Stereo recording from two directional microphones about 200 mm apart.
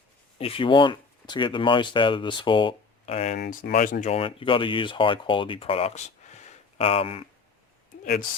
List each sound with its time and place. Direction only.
0.3 s speech: 30° left (ahead or behind)
3.4 s speech: 50° left (ahead or behind)
4.1 s speech: 25° left (ahead or behind)